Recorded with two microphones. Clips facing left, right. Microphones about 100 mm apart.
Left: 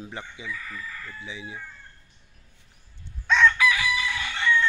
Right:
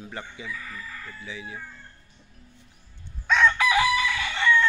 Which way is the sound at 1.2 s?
20° left (ahead or behind).